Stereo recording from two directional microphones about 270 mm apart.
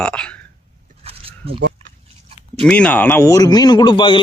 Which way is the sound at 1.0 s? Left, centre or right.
Right.